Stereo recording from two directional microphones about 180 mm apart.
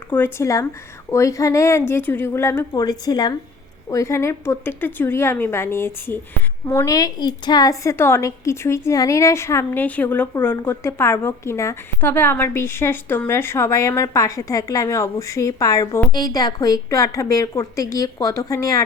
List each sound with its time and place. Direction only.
0.1 s a woman's voice: 15° left (ahead or behind)